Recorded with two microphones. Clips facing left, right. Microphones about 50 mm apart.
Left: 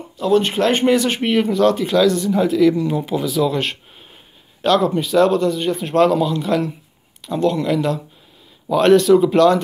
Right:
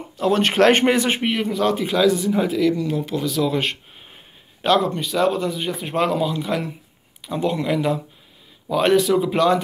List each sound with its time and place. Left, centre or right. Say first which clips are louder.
0.2 s speech: even; right
0.9 s speech: left 3 dB; right
1.2 s speech: left 5 dB; centre
2.7 s speech: left 3 dB; centre
4.7 s speech: left 8 dB; centre